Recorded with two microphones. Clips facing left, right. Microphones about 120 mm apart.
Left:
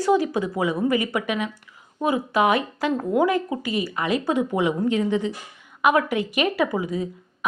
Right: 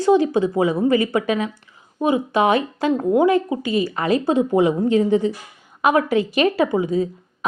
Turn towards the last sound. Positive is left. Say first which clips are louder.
# right 6 dB
turn(degrees=-25)  # may be behind; listen again after turning